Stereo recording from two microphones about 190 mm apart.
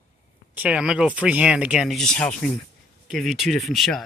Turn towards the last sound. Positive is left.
turn(degrees=0)  # may be behind; listen again after turning